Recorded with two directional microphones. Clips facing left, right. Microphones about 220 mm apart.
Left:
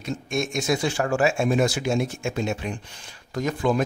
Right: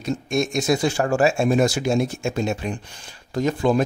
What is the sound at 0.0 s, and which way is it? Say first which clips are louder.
Speech: right 4 dB; 35° right (ahead or behind).